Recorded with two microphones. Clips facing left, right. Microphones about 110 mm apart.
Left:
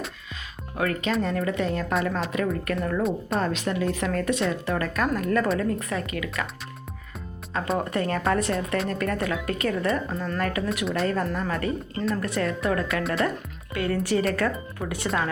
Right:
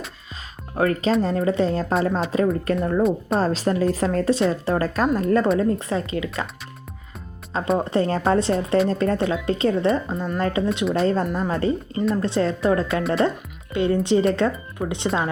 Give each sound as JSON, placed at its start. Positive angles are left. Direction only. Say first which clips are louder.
{"t": 0.8, "sound": "a woman's voice", "louder": "right 6 dB", "side_deg": -35}
{"t": 3.0, "sound": "speech", "louder": "right 6 dB", "side_deg": 0}
{"t": 3.3, "sound": "a woman's voice", "louder": "right 5 dB", "side_deg": -35}
{"t": 7.8, "sound": "speech", "louder": "right 5 dB", "side_deg": -25}
{"t": 13.0, "sound": "speech", "louder": "right 5 dB", "side_deg": 0}
{"t": 13.7, "sound": "speech", "louder": "right 5 dB", "side_deg": -25}